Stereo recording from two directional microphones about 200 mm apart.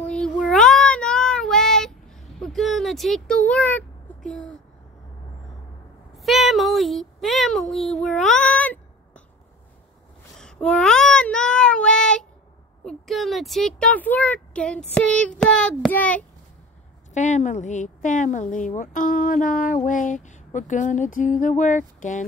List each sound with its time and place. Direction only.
0.0 s child singing: 5° left (ahead or behind)
6.1 s a sound: centre (ahead or behind)
7.7 s child singing: centre (ahead or behind)
10.3 s child singing: 5° left (ahead or behind)
12.8 s speech: centre (ahead or behind)
17.1 s a sound: 35° left (ahead or behind)